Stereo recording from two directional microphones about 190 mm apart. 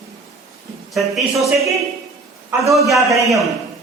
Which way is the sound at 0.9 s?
Centre (ahead or behind).